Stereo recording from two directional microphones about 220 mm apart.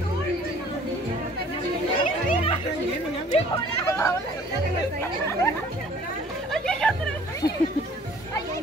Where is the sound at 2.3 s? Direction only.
30° left (ahead or behind).